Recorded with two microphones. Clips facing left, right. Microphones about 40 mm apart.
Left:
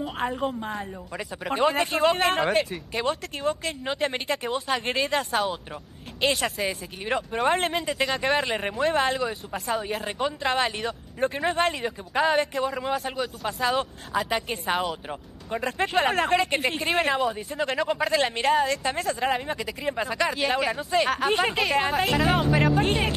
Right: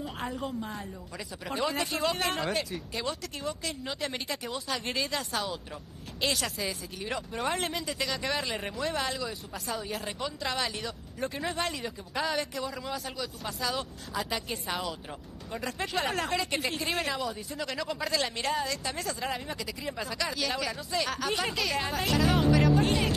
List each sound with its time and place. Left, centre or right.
0.0 s speech: left
3.3 s a woman's voice: centre
3.8 s a woman's voice: left